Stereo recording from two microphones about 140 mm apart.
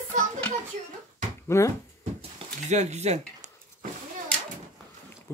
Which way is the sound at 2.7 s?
55° right (ahead or behind).